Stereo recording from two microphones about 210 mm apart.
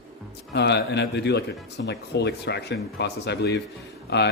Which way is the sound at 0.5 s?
55° left (ahead or behind).